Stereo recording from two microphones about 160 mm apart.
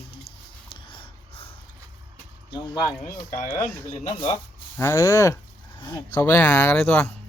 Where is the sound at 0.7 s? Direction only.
30° left (ahead or behind).